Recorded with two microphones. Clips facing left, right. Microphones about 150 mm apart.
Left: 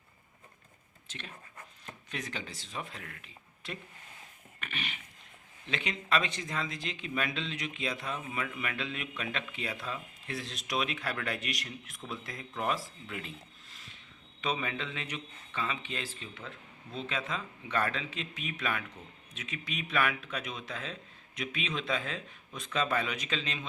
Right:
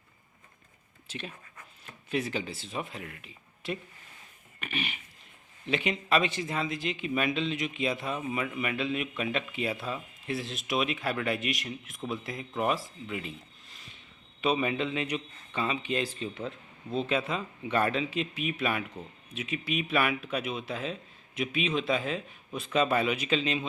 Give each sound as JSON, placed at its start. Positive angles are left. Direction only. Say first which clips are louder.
{"t": 1.0, "sound": "speech", "louder": "right 6 dB", "side_deg": -10}
{"t": 4.6, "sound": "speech", "louder": "right 5 dB", "side_deg": -10}
{"t": 14.4, "sound": "speech", "louder": "right 7 dB", "side_deg": -15}